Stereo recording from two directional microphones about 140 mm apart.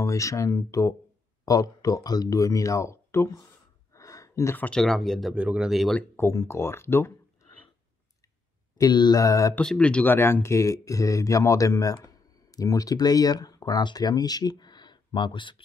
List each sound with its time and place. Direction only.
0.0 s speech: 20° left (ahead or behind)
3.9 s a sound: 25° left (ahead or behind)
4.6 s speech: 5° left (ahead or behind)
5.9 s speech: 15° left (ahead or behind)
8.7 s speech: 30° left (ahead or behind)
9.6 s speech: 5° left (ahead or behind); by 15.6 s 35° left (ahead or behind)